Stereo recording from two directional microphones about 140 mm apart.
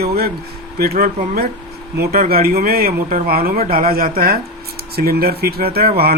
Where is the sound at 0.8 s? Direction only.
85° right.